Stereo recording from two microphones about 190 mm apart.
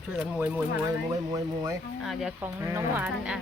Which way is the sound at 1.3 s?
20° right (ahead or behind).